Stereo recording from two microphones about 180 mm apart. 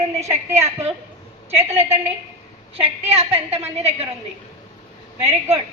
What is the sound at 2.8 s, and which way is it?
A woman's voice, 35° right (ahead or behind).